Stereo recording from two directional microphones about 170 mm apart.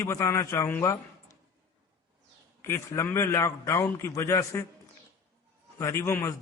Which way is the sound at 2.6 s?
15° left (ahead or behind).